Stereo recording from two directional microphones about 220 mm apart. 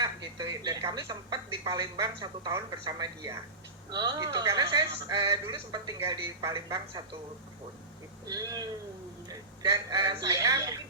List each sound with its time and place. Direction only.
0.0 s speech: 15° right (ahead or behind)
8.3 s speech: 15° right (ahead or behind)